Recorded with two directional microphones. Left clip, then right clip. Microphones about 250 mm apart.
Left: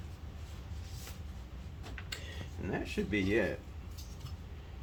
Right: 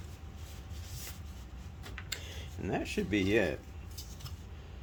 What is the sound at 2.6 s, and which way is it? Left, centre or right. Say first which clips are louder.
Speech: right 2 dB; right.